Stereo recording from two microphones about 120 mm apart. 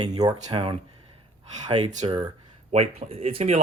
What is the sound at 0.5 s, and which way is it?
Speech, 50° right (ahead or behind).